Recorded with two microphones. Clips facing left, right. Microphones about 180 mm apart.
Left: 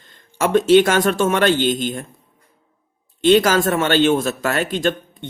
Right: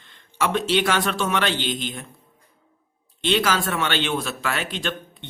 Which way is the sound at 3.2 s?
45° left (ahead or behind).